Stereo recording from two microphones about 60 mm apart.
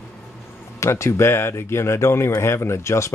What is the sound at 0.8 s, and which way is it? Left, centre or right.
Speech, left.